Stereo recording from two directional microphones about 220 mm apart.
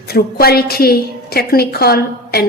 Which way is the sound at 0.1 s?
45° left (ahead or behind).